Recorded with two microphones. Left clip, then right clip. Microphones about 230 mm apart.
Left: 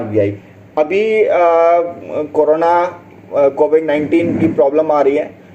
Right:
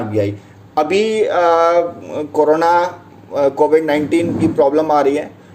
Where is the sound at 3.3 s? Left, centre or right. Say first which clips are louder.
Left 1 dB; right.